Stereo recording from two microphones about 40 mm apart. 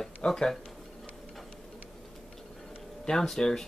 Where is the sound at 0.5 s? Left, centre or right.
Centre.